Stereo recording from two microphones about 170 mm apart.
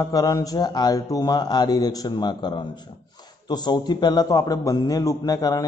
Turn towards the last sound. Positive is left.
turn(degrees=20)  # may be behind; listen again after turning